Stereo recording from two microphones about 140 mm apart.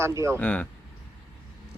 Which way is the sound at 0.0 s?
20° right (ahead or behind).